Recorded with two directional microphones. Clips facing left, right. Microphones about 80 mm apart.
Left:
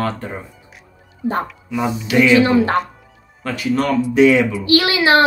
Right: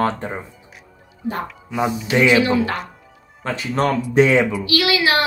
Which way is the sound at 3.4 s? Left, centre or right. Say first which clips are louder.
Left 2 dB; right.